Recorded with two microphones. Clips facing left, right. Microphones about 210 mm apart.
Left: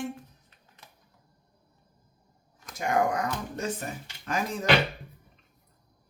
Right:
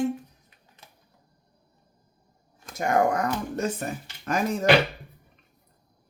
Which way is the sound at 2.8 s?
45° right (ahead or behind).